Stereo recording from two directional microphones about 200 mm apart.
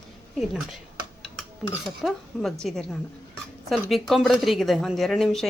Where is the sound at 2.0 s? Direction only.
Centre (ahead or behind).